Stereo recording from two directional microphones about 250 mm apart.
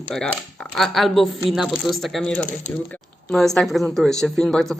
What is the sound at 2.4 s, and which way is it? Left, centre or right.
Speech, left.